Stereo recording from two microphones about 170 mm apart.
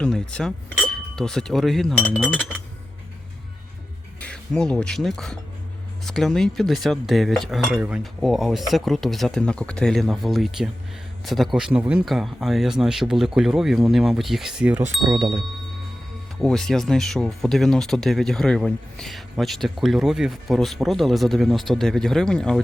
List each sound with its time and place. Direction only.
0.0 s speech: 5° left (ahead or behind)
4.2 s speech: 5° left (ahead or behind)
15.0 s speech: 25° right (ahead or behind)
16.4 s speech: 5° left (ahead or behind)